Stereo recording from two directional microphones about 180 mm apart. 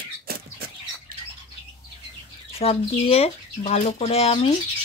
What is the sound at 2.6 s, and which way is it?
Speech, 35° left (ahead or behind).